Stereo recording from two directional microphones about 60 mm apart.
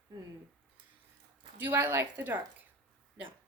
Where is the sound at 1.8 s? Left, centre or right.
Right.